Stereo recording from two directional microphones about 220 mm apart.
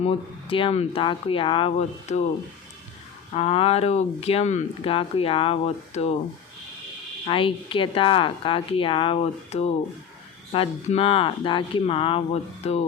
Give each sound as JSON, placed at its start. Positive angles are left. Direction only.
{"t": 0.0, "sound": "speech", "side_deg": 25}
{"t": 3.3, "sound": "speech", "side_deg": 25}
{"t": 7.3, "sound": "speech", "side_deg": 25}